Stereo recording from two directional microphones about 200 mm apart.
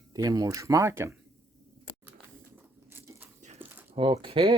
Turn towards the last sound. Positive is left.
turn(degrees=-25)  # may be behind; listen again after turning